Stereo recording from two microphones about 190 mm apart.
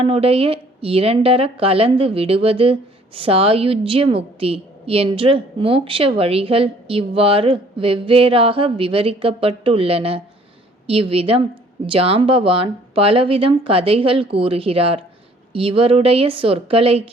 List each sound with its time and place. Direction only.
0.0 s a woman's voice: 30° right (ahead or behind)